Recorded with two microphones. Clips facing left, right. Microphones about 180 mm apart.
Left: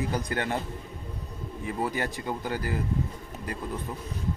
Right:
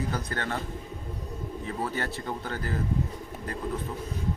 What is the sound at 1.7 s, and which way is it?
Speech, 15° left (ahead or behind).